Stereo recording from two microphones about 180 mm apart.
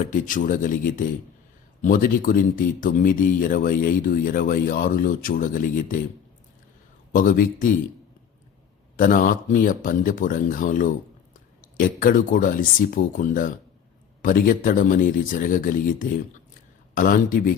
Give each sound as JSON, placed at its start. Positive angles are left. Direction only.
{"t": 0.1, "sound": "speech", "side_deg": 50}
{"t": 7.1, "sound": "speech", "side_deg": 50}
{"t": 9.0, "sound": "speech", "side_deg": 50}